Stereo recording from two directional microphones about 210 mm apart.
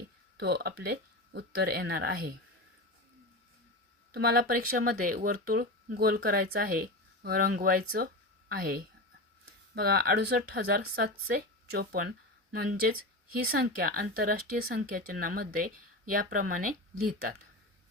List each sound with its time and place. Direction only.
0.3 s speech: 50° right (ahead or behind)
4.1 s speech: 50° right (ahead or behind)